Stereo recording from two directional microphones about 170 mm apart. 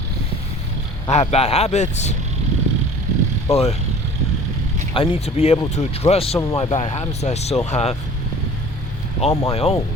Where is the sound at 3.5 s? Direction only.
35° left (ahead or behind).